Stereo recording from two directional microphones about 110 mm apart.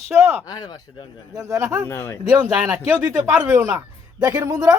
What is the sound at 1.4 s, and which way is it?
Speech, 30° right (ahead or behind).